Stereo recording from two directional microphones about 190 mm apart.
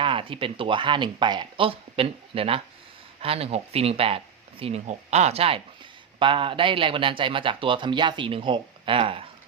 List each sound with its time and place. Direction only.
0.0 s speech: 25° right (ahead or behind)